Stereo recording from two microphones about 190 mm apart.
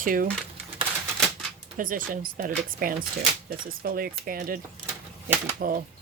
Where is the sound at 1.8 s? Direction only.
45° right (ahead or behind).